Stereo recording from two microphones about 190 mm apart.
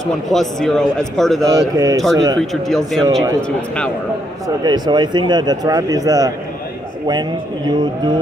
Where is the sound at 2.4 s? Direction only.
Centre (ahead or behind).